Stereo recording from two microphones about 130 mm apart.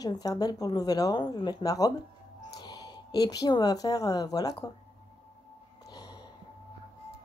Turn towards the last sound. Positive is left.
turn(degrees=30)  # may be behind; listen again after turning